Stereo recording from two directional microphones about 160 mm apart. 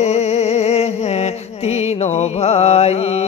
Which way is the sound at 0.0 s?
45° left (ahead or behind).